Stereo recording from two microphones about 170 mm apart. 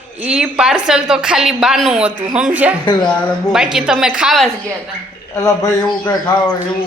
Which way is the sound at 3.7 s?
5° right (ahead or behind).